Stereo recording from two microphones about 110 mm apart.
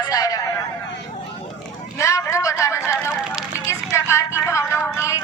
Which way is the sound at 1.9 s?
25° left (ahead or behind).